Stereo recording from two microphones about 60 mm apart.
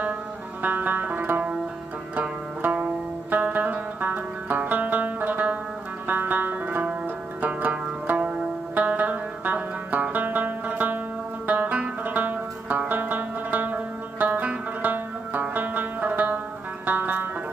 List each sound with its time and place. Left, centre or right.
0.6 s music: right
7.4 s zither: right
11.4 s music: right